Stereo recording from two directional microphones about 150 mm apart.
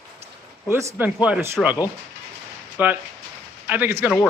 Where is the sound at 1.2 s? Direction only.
5° right (ahead or behind).